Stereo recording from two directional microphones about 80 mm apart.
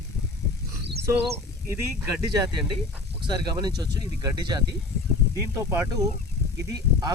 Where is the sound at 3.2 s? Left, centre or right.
Right.